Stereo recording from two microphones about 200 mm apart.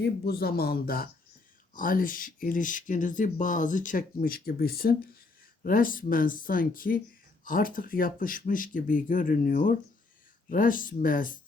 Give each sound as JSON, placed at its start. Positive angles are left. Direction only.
{"t": 0.0, "sound": "speech", "side_deg": 50}